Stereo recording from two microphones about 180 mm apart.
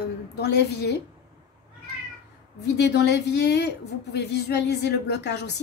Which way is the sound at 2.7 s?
70° left (ahead or behind).